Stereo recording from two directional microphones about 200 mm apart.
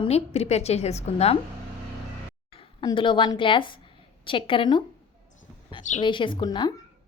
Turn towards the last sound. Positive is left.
turn(degrees=20)  # may be behind; listen again after turning